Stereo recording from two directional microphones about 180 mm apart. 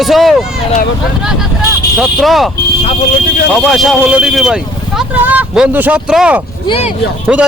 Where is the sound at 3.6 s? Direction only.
Centre (ahead or behind).